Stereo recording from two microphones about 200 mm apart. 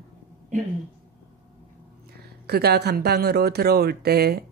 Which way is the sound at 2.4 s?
55° right (ahead or behind).